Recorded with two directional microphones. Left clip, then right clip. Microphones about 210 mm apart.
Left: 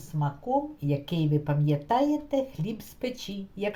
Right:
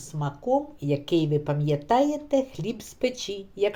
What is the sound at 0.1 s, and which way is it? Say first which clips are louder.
Speech: right 3 dB; 40° right (ahead or behind).